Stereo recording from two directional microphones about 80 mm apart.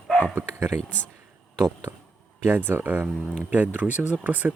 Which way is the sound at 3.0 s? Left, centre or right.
Centre.